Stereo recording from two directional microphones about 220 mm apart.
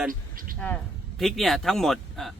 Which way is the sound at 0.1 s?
40° right (ahead or behind).